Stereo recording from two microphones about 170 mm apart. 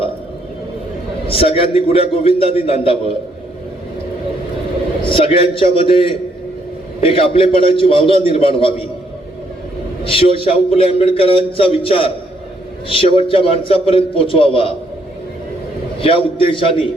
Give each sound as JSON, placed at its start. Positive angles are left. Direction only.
{"t": 1.3, "sound": "a man's voice", "side_deg": 35}
{"t": 5.0, "sound": "a man's voice", "side_deg": 30}
{"t": 10.1, "sound": "a man's voice", "side_deg": 30}
{"t": 16.0, "sound": "a man's voice", "side_deg": 30}